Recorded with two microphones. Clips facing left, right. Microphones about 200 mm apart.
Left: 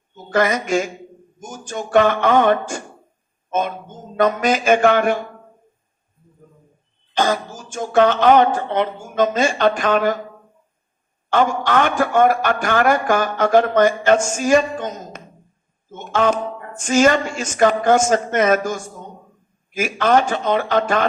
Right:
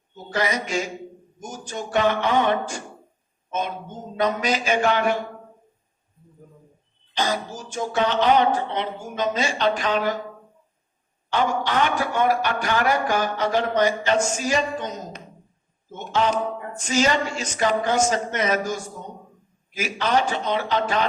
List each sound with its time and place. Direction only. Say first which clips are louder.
0.3 s a man's voice: left 7 dB; 50° left (ahead or behind)
7.1 s a man's voice: left 5 dB; 50° left (ahead or behind)
11.3 s a man's voice: left 5 dB; 50° left (ahead or behind)